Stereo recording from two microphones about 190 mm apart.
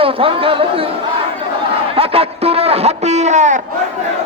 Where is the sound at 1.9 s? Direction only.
30° right (ahead or behind).